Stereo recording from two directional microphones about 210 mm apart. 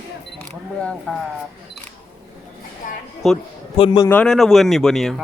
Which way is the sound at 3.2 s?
Centre (ahead or behind).